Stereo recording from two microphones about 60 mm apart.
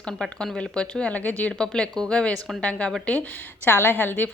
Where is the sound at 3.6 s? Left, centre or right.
Left.